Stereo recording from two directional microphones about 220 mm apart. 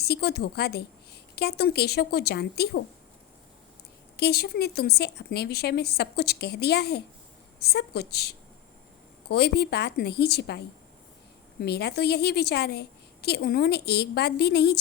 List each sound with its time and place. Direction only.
0.0 s a woman's voice: 45° left (ahead or behind)
4.2 s a woman's voice: 45° left (ahead or behind)